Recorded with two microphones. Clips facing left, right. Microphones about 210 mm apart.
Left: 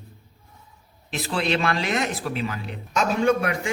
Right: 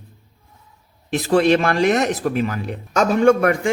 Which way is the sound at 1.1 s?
45° right (ahead or behind).